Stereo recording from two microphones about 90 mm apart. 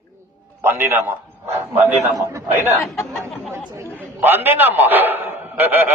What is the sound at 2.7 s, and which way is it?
Speech, 30° left (ahead or behind).